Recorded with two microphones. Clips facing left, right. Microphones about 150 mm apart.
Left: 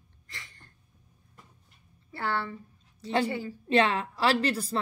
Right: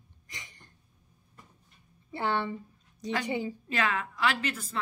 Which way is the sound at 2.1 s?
20° right (ahead or behind).